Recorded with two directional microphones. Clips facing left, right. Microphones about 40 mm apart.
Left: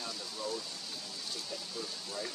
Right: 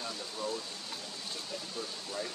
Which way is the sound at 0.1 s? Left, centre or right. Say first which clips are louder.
Right 1 dB; right.